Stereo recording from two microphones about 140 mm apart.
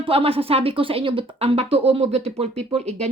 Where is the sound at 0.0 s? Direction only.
40° right (ahead or behind).